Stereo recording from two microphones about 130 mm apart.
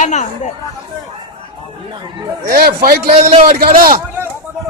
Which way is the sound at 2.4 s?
90° right.